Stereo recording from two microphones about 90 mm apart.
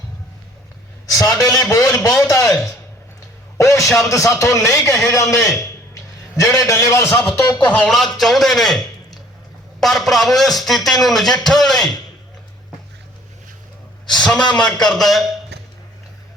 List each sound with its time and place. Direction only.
1.1 s a sound: 40° left (ahead or behind)
1.7 s a man's voice: 35° left (ahead or behind)
3.6 s a sound: 35° left (ahead or behind)
3.9 s a man's voice: 35° left (ahead or behind)
5.1 s a sound: 35° left (ahead or behind)
6.7 s a man's voice: 35° left (ahead or behind)
7.5 s a man's voice: 15° left (ahead or behind)
7.9 s speech: centre (ahead or behind)
9.8 s speech: centre (ahead or behind)
14.1 s a man's voice: 10° left (ahead or behind)